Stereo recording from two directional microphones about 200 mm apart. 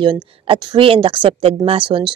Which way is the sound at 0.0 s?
25° right (ahead or behind).